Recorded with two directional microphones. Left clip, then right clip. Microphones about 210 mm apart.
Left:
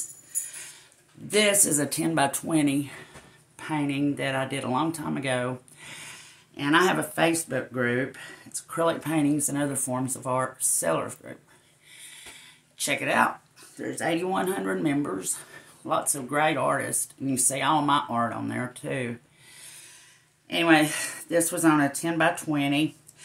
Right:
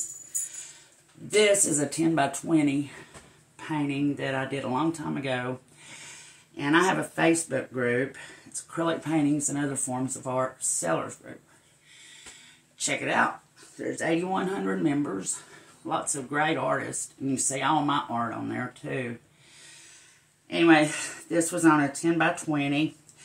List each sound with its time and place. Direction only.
1.3 s speech: 45° left (ahead or behind)
12.7 s speech: 45° left (ahead or behind)
20.4 s speech: 45° left (ahead or behind)